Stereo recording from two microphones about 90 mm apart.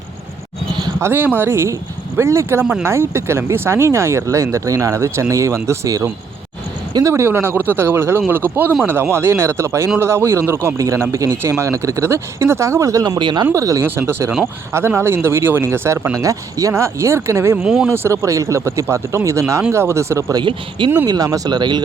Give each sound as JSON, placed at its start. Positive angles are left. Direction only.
{"t": 0.9, "sound": "speech", "side_deg": -25}
{"t": 13.1, "sound": "speech", "side_deg": -60}
{"t": 13.4, "sound": "speech", "side_deg": -35}
{"t": 17.6, "sound": "speech", "side_deg": -10}
{"t": 17.8, "sound": "speech", "side_deg": -25}
{"t": 20.3, "sound": "speech", "side_deg": -65}
{"t": 21.1, "sound": "speech", "side_deg": -40}
{"t": 21.5, "sound": "speech", "side_deg": -55}